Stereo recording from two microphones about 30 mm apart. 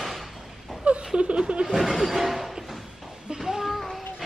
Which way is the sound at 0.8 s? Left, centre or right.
Right.